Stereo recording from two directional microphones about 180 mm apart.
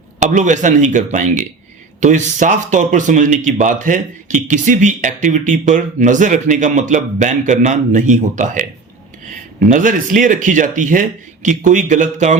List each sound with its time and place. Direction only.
0.2 s speech: 45° right (ahead or behind)
9.6 s speech: 50° right (ahead or behind)